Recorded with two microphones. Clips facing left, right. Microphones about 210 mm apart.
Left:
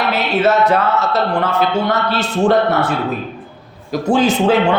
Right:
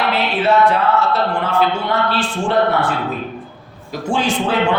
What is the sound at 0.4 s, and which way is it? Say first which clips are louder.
Speech: even; 40° left (ahead or behind).